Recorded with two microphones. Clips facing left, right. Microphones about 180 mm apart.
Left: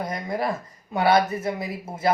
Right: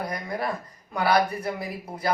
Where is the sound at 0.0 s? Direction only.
25° left (ahead or behind).